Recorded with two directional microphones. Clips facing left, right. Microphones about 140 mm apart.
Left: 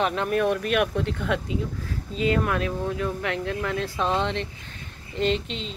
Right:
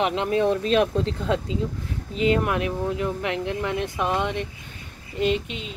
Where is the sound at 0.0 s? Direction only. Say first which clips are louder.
Right 2 dB; 20° right (ahead or behind).